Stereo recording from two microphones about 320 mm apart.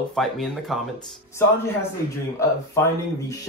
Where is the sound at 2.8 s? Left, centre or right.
Centre.